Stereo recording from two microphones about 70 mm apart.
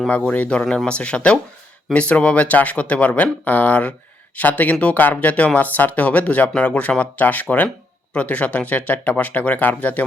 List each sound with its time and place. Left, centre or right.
0.1 s speech: centre